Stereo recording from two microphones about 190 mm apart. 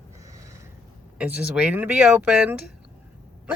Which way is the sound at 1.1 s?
5° right (ahead or behind).